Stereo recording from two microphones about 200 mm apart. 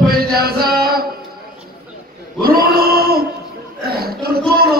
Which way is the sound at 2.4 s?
50° right (ahead or behind).